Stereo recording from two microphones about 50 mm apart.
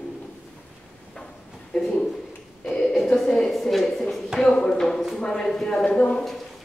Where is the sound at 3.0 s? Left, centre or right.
Centre.